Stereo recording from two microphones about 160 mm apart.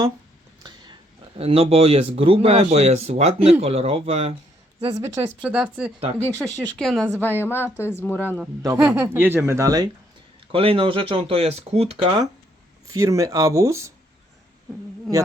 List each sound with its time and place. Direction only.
1.4 s speech: 40° right (ahead or behind)
4.9 s speech: 20° right (ahead or behind)
5.4 s speech: 10° right (ahead or behind)
6.0 s speech: 40° right (ahead or behind)
6.4 s speech: centre (ahead or behind)
8.6 s speech: 15° right (ahead or behind)
10.5 s speech: 35° right (ahead or behind)
12.9 s speech: 20° right (ahead or behind)